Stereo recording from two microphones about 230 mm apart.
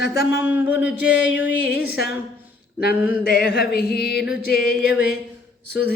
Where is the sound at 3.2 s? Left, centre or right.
Left.